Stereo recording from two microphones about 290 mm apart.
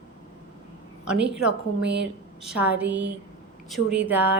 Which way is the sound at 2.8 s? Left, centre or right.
Right.